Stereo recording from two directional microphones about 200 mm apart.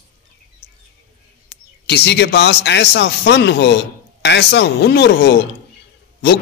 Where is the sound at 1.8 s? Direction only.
60° left (ahead or behind).